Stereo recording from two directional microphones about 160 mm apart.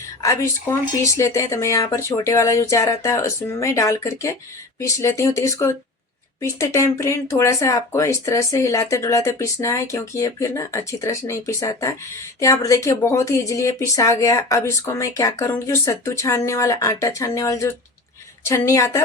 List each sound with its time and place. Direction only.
0.2 s speech: 20° left (ahead or behind)